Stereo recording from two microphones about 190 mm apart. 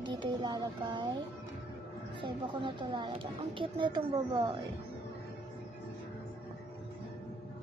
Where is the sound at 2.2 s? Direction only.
25° right (ahead or behind).